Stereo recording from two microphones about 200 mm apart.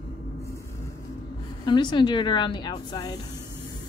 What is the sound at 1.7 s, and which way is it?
A woman's voice, 20° left (ahead or behind).